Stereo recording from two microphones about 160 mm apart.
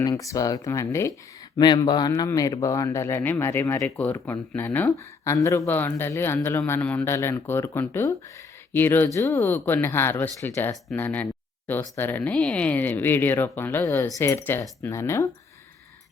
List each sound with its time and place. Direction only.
0.0 s a man's voice: 20° left (ahead or behind)